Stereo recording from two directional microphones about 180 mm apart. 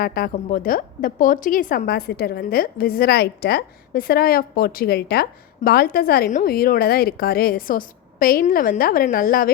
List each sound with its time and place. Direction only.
0.0 s a woman's voice: 55° left (ahead or behind)